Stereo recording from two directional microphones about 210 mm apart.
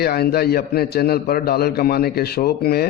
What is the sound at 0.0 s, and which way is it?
A man's voice, 50° left (ahead or behind).